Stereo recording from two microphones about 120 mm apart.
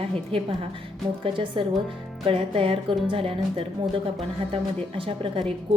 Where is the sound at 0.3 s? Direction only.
50° right (ahead or behind).